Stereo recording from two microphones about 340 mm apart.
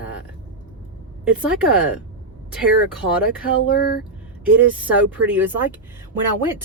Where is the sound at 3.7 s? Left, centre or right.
Left.